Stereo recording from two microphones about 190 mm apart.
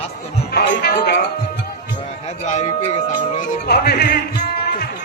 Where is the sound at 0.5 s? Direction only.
55° left (ahead or behind).